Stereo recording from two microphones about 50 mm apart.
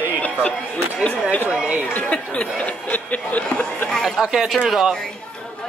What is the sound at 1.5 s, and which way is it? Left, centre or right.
Speech, centre.